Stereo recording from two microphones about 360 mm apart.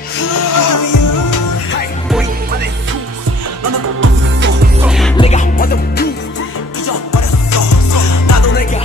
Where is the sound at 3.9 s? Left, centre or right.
Right.